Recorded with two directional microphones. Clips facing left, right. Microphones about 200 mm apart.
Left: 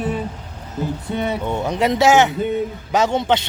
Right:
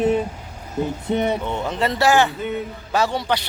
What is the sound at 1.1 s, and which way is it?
Speech, 20° right (ahead or behind).